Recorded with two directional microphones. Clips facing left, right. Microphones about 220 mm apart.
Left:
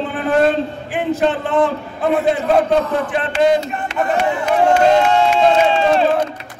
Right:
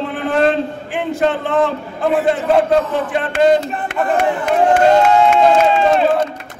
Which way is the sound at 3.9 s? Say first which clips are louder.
Right 1 dB; 55° right (ahead or behind).